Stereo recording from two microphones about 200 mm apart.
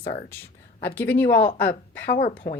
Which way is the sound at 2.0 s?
50° left (ahead or behind).